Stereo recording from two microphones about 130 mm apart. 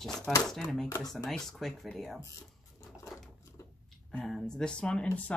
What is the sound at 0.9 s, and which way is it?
Speech, 20° left (ahead or behind).